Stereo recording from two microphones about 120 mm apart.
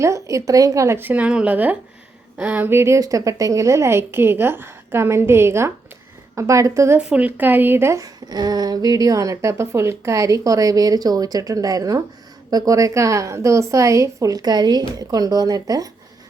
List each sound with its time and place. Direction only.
0.0 s speech: 25° right (ahead or behind)
7.1 s speech: 10° right (ahead or behind); by 15.9 s 30° right (ahead or behind)